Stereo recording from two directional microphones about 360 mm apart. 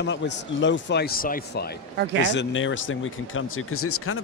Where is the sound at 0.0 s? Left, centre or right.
Left.